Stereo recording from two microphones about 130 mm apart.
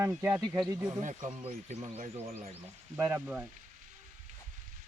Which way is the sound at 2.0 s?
55° right (ahead or behind).